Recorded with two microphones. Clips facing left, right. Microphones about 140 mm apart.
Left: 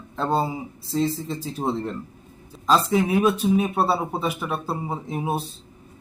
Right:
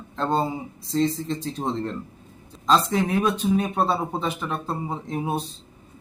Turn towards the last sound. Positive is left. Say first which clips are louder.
# left 1 dB
turn(degrees=5)  # may be behind; listen again after turning